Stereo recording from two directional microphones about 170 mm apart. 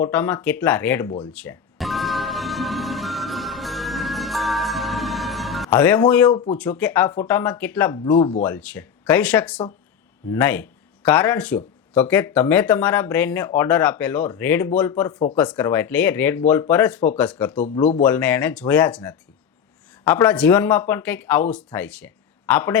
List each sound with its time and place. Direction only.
0.0 s speech: 10° left (ahead or behind)
1.3 s music: 5° left (ahead or behind)
5.7 s speech: 10° left (ahead or behind)
7.9 s speech: 25° left (ahead or behind)
8.4 s speech: 10° left (ahead or behind)